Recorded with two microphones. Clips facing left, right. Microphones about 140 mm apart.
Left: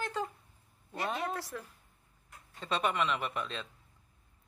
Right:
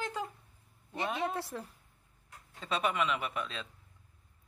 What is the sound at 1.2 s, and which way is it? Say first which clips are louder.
Speech: right 2 dB; 25° right (ahead or behind).